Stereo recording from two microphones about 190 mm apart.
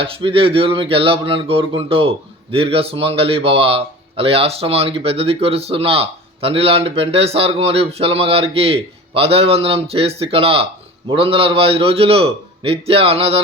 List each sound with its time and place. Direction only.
0.0 s speech: 30° right (ahead or behind)